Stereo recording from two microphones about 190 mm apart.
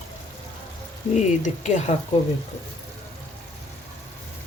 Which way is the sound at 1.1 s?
40° left (ahead or behind).